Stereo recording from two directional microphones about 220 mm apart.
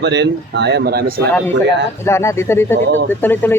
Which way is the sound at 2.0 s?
10° left (ahead or behind).